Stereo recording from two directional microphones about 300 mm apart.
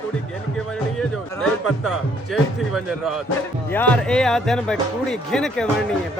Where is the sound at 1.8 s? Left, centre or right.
Centre.